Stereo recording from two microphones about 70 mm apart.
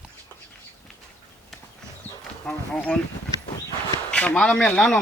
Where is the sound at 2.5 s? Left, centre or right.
Centre.